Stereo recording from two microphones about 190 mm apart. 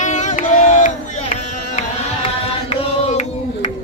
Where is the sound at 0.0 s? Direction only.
40° left (ahead or behind).